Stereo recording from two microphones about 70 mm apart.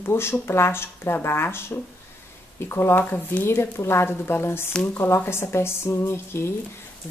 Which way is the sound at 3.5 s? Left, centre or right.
Left.